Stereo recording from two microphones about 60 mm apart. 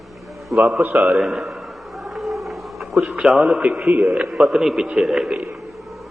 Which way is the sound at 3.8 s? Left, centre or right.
Right.